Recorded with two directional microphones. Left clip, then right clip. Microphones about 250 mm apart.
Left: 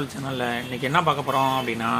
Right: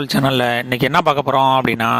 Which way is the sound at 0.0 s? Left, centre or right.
Right.